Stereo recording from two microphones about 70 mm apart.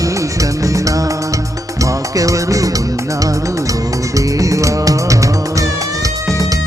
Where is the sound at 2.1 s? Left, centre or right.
Right.